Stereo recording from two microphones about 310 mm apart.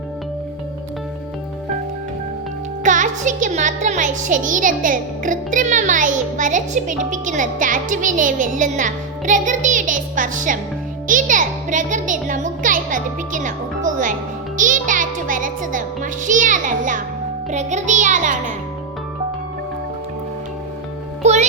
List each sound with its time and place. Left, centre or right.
2.8 s a child's voice: right
21.2 s music: right